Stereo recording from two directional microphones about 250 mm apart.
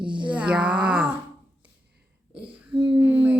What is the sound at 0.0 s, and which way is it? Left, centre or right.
Groan, centre.